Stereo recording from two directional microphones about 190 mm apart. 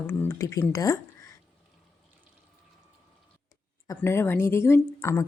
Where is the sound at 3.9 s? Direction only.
15° left (ahead or behind).